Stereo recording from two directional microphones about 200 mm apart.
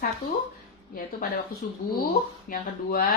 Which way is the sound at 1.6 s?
45° left (ahead or behind).